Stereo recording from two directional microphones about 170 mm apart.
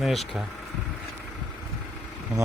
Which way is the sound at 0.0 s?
Centre (ahead or behind).